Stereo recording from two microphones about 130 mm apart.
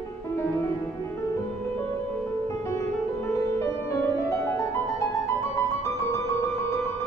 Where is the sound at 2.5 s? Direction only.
25° left (ahead or behind).